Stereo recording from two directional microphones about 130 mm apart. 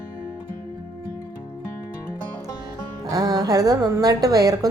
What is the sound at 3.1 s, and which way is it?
Speech, 30° right (ahead or behind).